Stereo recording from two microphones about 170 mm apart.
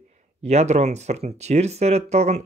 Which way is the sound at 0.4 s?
40° right (ahead or behind).